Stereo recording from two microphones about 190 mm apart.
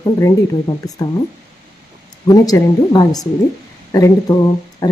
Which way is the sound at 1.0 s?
20° left (ahead or behind).